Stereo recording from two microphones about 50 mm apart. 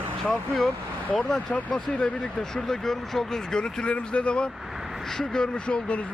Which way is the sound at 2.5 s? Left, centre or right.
Centre.